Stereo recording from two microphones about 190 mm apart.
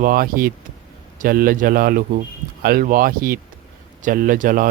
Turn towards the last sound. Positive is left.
turn(degrees=-45)  # may be behind; listen again after turning